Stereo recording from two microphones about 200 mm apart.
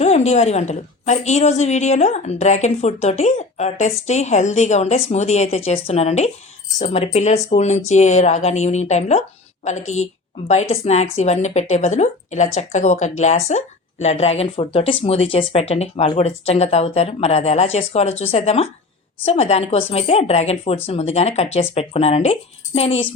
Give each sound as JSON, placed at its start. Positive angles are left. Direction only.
{"t": 0.0, "sound": "a woman's voice", "side_deg": 35}